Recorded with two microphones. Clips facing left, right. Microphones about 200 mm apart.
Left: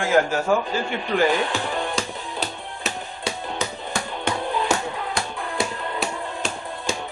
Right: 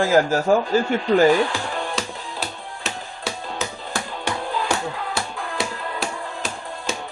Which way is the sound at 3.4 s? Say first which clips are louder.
Left 1 dB; 20° left (ahead or behind).